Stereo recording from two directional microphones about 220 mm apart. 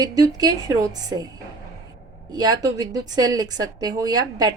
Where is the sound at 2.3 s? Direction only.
20° right (ahead or behind).